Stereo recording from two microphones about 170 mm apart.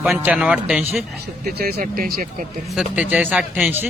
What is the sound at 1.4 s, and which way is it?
Speech, 65° right (ahead or behind).